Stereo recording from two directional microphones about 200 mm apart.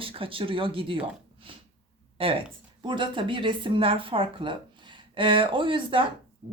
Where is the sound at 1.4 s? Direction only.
25° right (ahead or behind).